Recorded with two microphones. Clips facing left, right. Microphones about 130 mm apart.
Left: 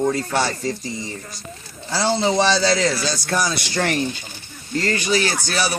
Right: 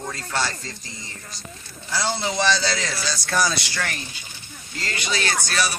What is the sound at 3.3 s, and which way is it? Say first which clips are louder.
Speech: even; 20° left (ahead or behind).